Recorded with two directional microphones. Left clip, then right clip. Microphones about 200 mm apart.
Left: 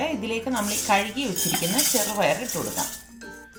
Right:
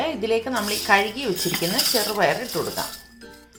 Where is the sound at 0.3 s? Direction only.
25° right (ahead or behind).